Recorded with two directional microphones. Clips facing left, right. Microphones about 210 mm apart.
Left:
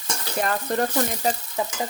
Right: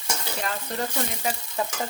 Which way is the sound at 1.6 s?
20° left (ahead or behind).